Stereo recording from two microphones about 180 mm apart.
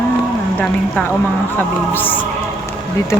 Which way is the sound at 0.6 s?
5° left (ahead or behind).